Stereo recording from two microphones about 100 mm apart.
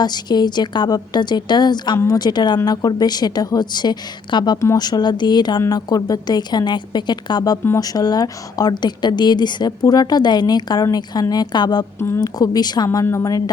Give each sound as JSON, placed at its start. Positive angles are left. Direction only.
{"t": 0.0, "sound": "speech", "side_deg": 45}
{"t": 4.6, "sound": "speech", "side_deg": 35}
{"t": 11.9, "sound": "a woman's voice", "side_deg": 25}
{"t": 12.2, "sound": "speech", "side_deg": 40}